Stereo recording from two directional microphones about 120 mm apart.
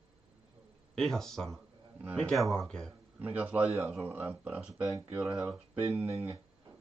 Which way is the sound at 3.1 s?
15° right (ahead or behind).